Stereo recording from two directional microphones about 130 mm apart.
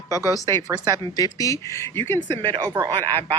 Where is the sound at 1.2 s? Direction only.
25° left (ahead or behind).